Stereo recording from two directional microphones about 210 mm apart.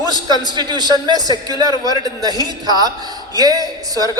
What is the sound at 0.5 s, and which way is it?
A man's voice, 20° right (ahead or behind).